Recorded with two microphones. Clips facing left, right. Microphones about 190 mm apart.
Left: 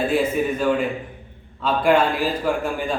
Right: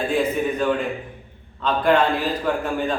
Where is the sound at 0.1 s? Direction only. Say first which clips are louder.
Left 1 dB; 5° left (ahead or behind).